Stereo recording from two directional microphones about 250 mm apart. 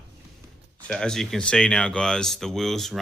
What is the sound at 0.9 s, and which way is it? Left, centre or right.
Speech, centre.